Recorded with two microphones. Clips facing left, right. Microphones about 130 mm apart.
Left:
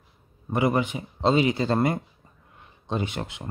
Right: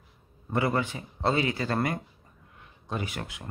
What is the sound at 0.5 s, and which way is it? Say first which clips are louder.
Speech: left 4 dB; 15° left (ahead or behind).